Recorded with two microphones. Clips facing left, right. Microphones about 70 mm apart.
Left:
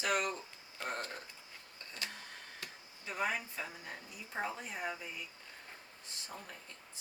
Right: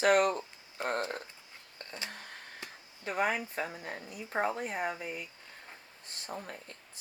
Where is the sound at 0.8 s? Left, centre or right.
Centre.